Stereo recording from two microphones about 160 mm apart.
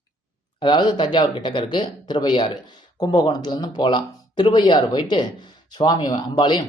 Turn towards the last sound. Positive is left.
turn(degrees=25)  # may be behind; listen again after turning